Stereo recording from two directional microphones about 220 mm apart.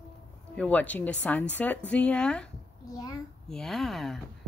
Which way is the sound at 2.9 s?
15° left (ahead or behind).